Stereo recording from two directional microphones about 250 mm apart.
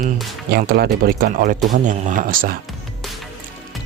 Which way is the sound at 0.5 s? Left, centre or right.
Right.